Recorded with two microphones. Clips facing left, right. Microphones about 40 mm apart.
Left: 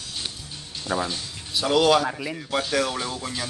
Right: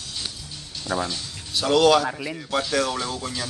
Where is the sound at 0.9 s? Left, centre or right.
Left.